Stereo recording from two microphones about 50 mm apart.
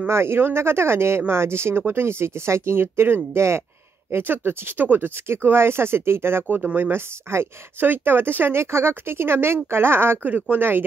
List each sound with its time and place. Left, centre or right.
0.1 s speech: right
3.3 s speech: right
4.1 s speech: right